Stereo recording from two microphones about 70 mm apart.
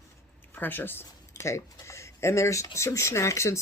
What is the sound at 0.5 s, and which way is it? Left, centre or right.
Speech, left.